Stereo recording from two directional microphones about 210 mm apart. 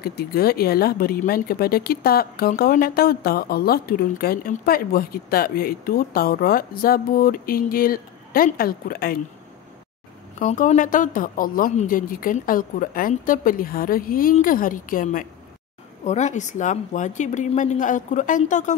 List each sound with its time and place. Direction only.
0.0 s speech: 50° left (ahead or behind)
10.4 s speech: 35° left (ahead or behind)